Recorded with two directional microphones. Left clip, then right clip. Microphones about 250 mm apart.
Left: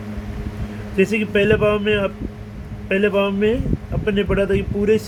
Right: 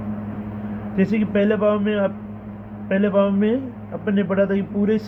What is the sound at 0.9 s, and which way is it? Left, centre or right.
A man's voice, left.